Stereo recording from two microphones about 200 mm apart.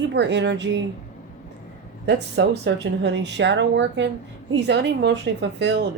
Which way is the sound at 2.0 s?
60° right (ahead or behind).